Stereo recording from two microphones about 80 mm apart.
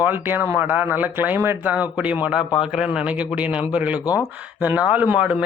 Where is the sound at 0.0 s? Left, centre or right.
Right.